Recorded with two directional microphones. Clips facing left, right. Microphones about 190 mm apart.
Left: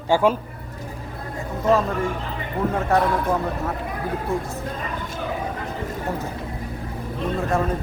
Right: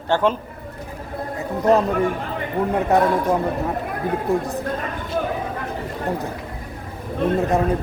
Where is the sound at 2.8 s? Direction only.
15° right (ahead or behind).